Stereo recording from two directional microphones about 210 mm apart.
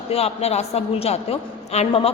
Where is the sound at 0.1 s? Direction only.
30° left (ahead or behind).